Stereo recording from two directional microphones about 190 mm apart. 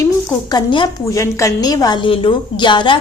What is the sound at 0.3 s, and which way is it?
A woman's voice, 20° left (ahead or behind).